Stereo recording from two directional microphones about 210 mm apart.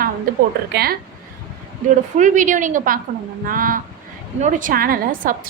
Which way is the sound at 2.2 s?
35° right (ahead or behind).